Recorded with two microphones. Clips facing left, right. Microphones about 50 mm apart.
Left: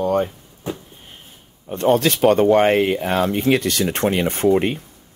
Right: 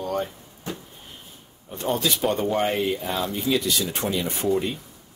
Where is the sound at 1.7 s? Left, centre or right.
Left.